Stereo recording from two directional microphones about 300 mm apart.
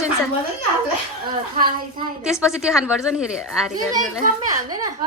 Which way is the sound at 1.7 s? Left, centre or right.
Centre.